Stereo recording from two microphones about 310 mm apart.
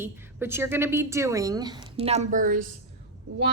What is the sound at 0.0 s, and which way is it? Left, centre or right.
A woman's voice, centre.